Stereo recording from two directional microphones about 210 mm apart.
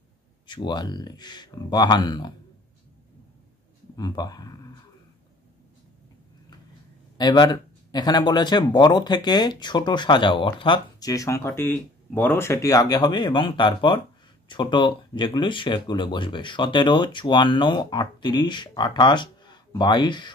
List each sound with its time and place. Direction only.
0.5 s speech: 20° left (ahead or behind)
3.9 s speech: 20° left (ahead or behind)
7.2 s speech: 20° left (ahead or behind)